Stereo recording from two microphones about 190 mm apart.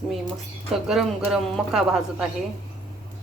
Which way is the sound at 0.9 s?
Centre (ahead or behind).